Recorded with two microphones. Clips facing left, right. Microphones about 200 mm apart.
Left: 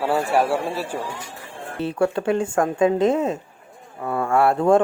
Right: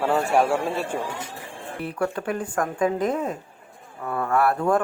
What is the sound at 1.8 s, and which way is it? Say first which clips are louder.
Speech: left 5 dB; 25° left (ahead or behind).